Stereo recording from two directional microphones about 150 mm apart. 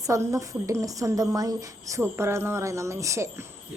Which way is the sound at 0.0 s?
20° right (ahead or behind).